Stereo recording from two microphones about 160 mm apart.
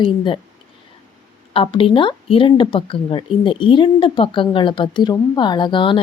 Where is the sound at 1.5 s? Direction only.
35° left (ahead or behind).